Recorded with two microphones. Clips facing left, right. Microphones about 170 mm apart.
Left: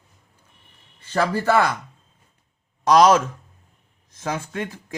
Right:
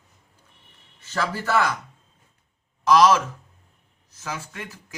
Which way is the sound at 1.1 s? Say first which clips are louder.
Left 5 dB; 55° left (ahead or behind).